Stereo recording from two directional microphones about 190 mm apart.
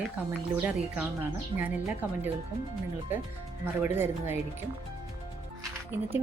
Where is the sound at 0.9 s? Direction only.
10° right (ahead or behind).